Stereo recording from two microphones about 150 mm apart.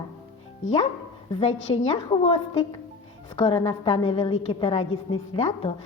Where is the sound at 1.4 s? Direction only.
50° left (ahead or behind).